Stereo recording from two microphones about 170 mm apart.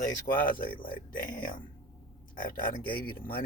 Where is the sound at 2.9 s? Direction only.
65° left (ahead or behind).